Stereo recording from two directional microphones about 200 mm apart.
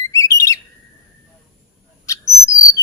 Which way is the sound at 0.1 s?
15° left (ahead or behind).